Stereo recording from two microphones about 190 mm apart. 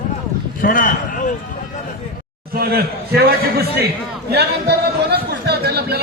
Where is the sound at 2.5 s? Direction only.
55° right (ahead or behind).